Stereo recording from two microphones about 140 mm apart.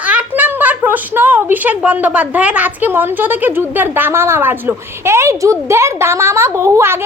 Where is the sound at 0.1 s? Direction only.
10° right (ahead or behind).